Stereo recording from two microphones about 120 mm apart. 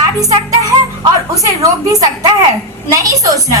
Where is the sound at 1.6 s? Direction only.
30° right (ahead or behind).